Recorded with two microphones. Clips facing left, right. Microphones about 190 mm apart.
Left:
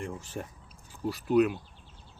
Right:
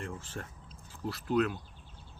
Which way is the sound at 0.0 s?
15° left (ahead or behind).